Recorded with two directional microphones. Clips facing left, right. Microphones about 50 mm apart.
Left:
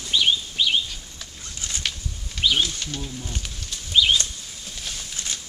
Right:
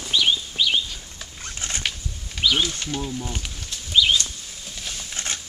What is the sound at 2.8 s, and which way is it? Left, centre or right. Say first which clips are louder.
Speech: right 4 dB; centre.